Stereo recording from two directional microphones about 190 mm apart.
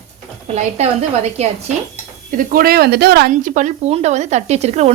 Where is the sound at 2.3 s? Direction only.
45° right (ahead or behind).